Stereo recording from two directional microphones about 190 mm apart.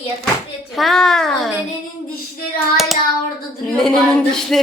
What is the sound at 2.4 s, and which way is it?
Child singing, 50° left (ahead or behind).